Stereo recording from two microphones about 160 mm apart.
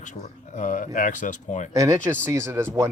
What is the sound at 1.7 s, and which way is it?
Speech, 20° right (ahead or behind).